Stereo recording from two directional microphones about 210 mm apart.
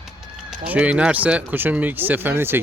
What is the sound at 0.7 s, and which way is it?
Speech, 5° right (ahead or behind).